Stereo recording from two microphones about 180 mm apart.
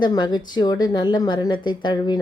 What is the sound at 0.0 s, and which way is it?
A woman's voice, 25° left (ahead or behind).